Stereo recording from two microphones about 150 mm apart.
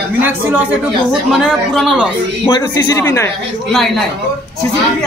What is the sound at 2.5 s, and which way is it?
Speech, 30° left (ahead or behind).